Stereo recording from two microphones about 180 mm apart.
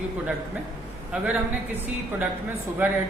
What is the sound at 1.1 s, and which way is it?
Speech, 5° right (ahead or behind).